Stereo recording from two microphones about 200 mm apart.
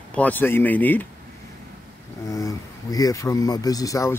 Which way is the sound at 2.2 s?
15° left (ahead or behind).